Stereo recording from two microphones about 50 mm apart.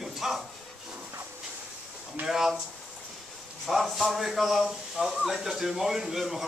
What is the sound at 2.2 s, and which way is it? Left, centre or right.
Speech, centre.